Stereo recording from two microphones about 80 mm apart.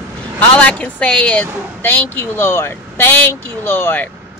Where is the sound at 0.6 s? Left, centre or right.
Centre.